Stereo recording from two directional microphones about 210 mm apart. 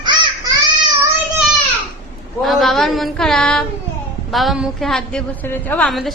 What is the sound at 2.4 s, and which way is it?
A woman's voice, centre (ahead or behind).